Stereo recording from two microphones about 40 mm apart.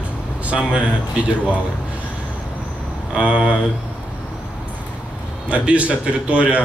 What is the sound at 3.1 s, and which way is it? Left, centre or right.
Speech, right.